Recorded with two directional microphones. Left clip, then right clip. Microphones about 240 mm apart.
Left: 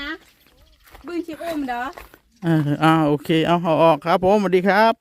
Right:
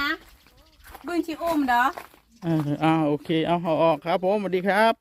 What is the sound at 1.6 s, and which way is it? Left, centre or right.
Speech, right.